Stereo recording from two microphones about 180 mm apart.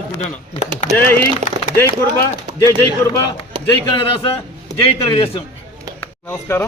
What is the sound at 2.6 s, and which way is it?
Speech, 20° left (ahead or behind).